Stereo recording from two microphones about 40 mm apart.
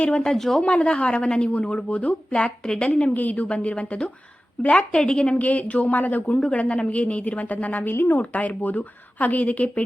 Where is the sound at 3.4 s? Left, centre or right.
Left.